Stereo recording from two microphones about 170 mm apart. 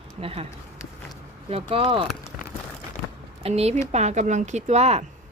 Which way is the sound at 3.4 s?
40° right (ahead or behind).